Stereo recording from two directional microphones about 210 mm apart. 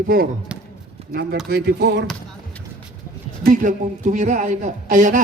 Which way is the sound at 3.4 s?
40° right (ahead or behind).